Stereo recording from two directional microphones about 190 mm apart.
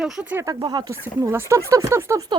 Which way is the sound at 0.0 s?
5° right (ahead or behind).